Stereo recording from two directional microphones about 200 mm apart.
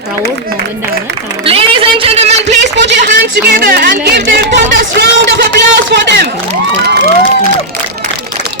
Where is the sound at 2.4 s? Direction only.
60° right (ahead or behind).